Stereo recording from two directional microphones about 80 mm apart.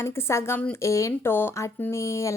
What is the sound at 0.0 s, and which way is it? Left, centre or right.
A woman's voice, left.